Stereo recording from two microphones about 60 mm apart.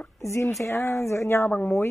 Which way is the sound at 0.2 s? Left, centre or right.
Left.